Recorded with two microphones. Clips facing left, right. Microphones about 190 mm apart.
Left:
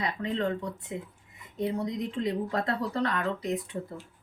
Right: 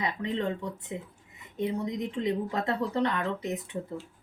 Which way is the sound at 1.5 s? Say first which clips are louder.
Even; 20° right (ahead or behind).